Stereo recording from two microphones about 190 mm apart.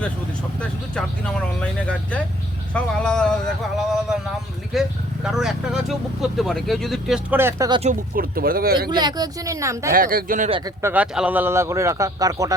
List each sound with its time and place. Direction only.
2.7 s speech: 5° left (ahead or behind); by 7.7 s 10° right (ahead or behind)
7.7 s speech: 35° right (ahead or behind)
8.1 s speech: 50° right (ahead or behind)
8.9 s speech: 20° right (ahead or behind)
9.9 s speech: 50° right (ahead or behind)
10.8 s speech: 5° right (ahead or behind)